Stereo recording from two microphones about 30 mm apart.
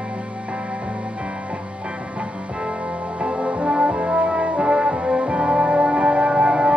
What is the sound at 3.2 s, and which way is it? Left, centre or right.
Brass instrument, right.